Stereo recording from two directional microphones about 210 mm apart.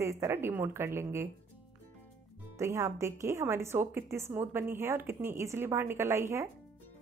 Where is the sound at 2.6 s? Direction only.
15° right (ahead or behind).